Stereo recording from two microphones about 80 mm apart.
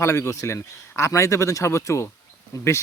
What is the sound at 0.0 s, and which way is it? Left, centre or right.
Speech, left.